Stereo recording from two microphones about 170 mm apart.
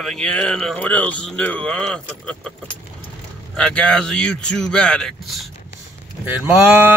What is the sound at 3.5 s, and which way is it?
Speech, 5° left (ahead or behind).